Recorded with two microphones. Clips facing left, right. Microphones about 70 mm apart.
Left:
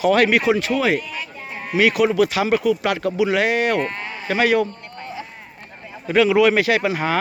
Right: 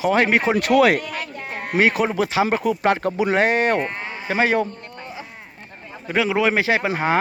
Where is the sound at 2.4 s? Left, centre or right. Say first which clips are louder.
Left 1 dB; right.